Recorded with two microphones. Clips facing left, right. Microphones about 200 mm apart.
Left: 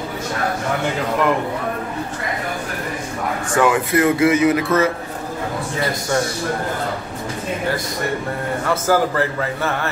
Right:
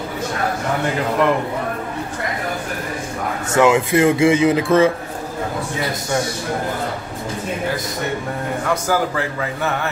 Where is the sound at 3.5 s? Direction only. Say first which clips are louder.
Right 3 dB; 25° right (ahead or behind).